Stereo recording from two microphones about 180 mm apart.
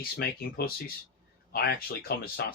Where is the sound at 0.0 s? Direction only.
55° left (ahead or behind).